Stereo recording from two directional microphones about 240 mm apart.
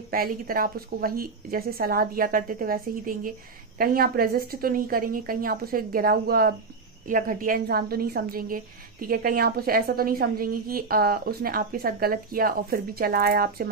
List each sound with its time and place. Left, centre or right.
0.1 s a woman's voice: right